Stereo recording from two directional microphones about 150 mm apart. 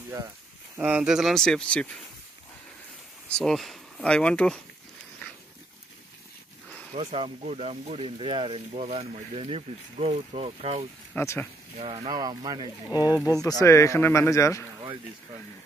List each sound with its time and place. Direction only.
0.7 s speech: 10° right (ahead or behind); by 1.9 s 5° left (ahead or behind)
3.3 s speech: 5° left (ahead or behind)
6.9 s speech: 40° right (ahead or behind)
11.1 s speech: 15° left (ahead or behind)
11.8 s speech: 40° right (ahead or behind)
12.1 s speech: 25° right (ahead or behind)
13.2 s a man's voice: 25° left (ahead or behind)